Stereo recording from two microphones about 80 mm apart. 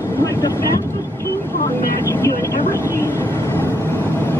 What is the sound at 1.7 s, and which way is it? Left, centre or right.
Speech, left.